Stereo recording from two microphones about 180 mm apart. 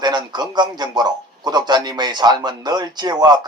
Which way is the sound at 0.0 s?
25° right (ahead or behind).